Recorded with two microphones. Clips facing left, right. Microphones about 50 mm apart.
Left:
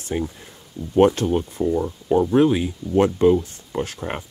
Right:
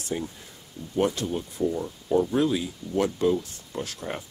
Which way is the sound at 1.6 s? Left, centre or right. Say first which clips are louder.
Left 5 dB; left.